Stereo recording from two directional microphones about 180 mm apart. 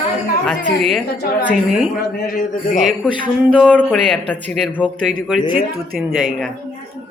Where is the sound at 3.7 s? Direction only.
5° left (ahead or behind).